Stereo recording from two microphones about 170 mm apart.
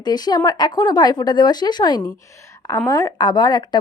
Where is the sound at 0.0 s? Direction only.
25° left (ahead or behind).